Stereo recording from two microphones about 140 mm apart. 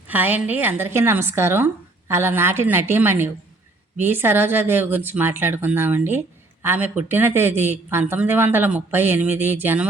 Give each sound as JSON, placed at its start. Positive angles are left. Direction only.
{"t": 0.1, "sound": "speech", "side_deg": -10}